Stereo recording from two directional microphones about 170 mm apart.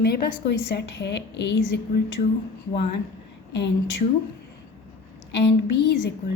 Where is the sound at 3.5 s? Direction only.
90° left.